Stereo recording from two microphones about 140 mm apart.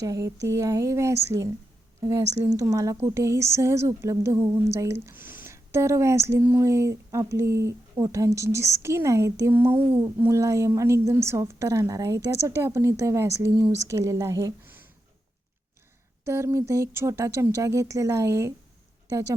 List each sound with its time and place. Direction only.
0.0 s a woman's voice: 25° right (ahead or behind)
16.2 s a woman's voice: 20° right (ahead or behind)